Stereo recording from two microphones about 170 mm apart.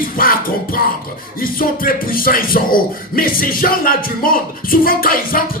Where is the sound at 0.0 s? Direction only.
55° left (ahead or behind).